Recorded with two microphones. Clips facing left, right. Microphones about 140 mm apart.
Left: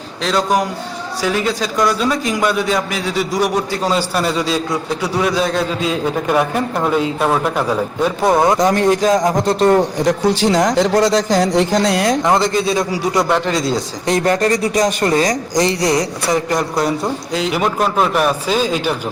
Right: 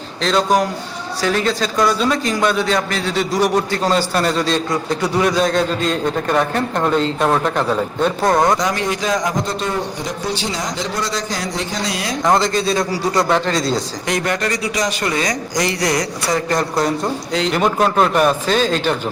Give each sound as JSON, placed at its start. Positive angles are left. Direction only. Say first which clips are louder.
{"t": 0.2, "sound": "a man's voice", "louder": "right 1 dB", "side_deg": 5}
{"t": 8.5, "sound": "speech", "louder": "left 6 dB", "side_deg": 50}
{"t": 9.5, "sound": "speech", "louder": "left 9 dB", "side_deg": 60}
{"t": 12.4, "sound": "a man's voice", "louder": "left 2 dB", "side_deg": 15}
{"t": 14.1, "sound": "speech", "louder": "left 6 dB", "side_deg": 35}
{"t": 16.5, "sound": "a man's voice", "louder": "left 1 dB", "side_deg": 10}